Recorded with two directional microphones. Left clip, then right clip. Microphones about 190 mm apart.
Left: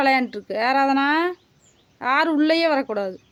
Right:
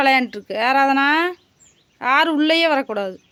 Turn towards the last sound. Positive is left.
turn(degrees=-5)  # may be behind; listen again after turning